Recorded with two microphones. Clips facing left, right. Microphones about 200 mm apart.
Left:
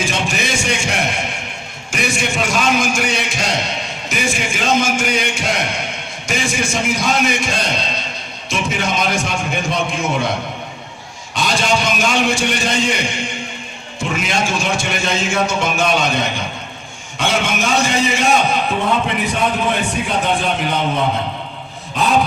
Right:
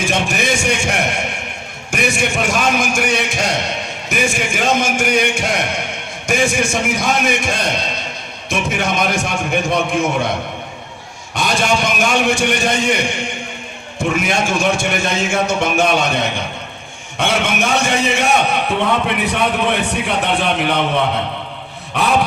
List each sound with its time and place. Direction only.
0.0 s a sound: 55° right (ahead or behind)
1.9 s a man's voice: 60° right (ahead or behind)
11.3 s a man's voice: 55° right (ahead or behind)
14.0 s a man's voice: 55° right (ahead or behind)
17.2 s a man's voice: 60° right (ahead or behind)